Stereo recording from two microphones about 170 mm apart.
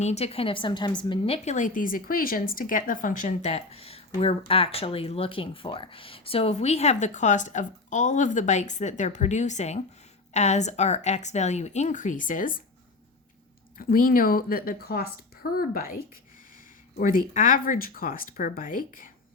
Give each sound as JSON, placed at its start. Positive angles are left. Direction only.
{"t": 0.0, "sound": "a woman's voice", "side_deg": 40}
{"t": 13.7, "sound": "a woman's voice", "side_deg": 55}